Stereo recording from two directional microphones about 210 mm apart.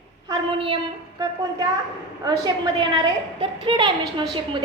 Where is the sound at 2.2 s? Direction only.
20° right (ahead or behind).